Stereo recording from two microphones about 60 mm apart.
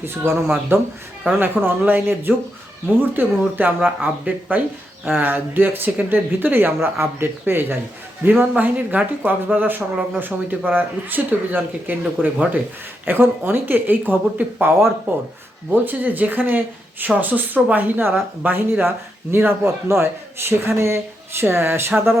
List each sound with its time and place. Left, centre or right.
0.0 s a man's voice: right
1.2 s a man's voice: right